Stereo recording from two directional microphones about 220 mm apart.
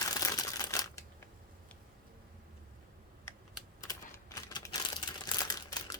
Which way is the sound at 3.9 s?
15° left (ahead or behind).